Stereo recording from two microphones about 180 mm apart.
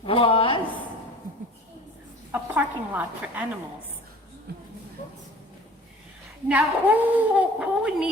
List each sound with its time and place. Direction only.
0.0 s a sound: 30° left (ahead or behind)
2.3 s a woman's voice: 10° right (ahead or behind)
4.5 s speech: 60° right (ahead or behind)
6.5 s a woman's voice: 10° right (ahead or behind)